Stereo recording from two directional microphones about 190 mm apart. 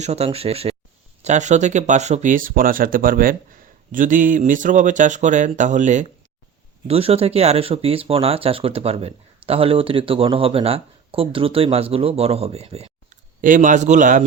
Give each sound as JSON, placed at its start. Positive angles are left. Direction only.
{"t": 0.0, "sound": "speech", "side_deg": -35}